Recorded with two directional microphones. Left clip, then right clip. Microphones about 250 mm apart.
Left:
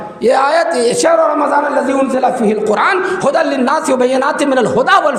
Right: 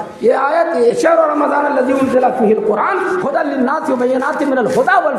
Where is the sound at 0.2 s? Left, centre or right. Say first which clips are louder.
Left 2 dB; left.